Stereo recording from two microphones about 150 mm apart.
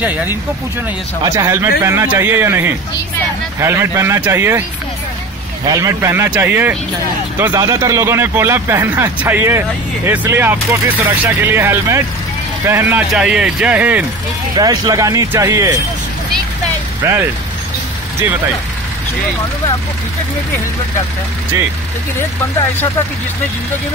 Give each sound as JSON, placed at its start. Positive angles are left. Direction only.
{"t": 0.0, "sound": "speech", "side_deg": -10}
{"t": 5.7, "sound": "speech", "side_deg": -20}
{"t": 14.5, "sound": "speech", "side_deg": -25}
{"t": 17.0, "sound": "speech", "side_deg": -15}